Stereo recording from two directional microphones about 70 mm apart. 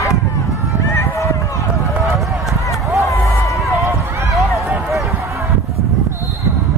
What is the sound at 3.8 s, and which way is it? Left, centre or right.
Run, right.